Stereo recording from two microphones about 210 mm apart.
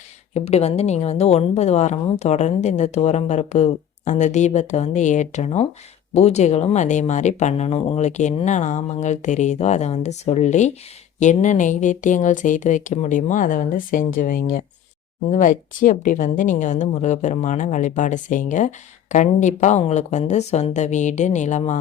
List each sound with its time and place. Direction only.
0.3 s a woman's voice: 30° left (ahead or behind)